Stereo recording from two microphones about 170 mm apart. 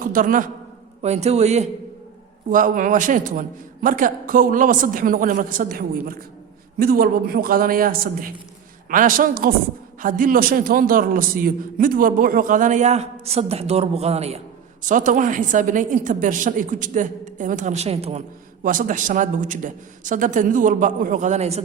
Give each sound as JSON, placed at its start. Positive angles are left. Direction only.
{"t": 0.0, "sound": "a man's voice", "side_deg": -55}
{"t": 1.0, "sound": "a man's voice", "side_deg": -40}
{"t": 2.5, "sound": "a man's voice", "side_deg": -50}
{"t": 18.6, "sound": "a man's voice", "side_deg": -50}